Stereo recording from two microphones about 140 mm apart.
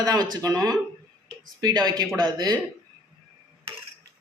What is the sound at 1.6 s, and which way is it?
Speech, 30° right (ahead or behind).